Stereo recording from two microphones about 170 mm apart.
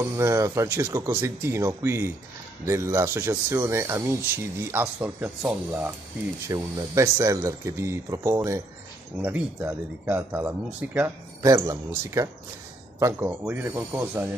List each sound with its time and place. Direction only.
0.0 s speech: 15° right (ahead or behind)